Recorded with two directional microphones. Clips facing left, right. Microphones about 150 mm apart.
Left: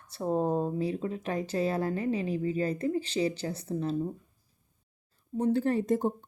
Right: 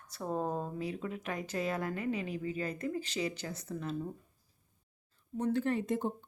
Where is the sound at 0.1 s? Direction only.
30° left (ahead or behind).